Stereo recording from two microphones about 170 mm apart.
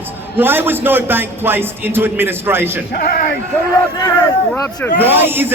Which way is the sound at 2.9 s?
60° left (ahead or behind).